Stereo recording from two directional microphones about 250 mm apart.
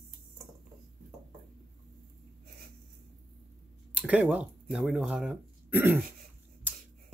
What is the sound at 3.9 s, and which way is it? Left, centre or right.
Speech, centre.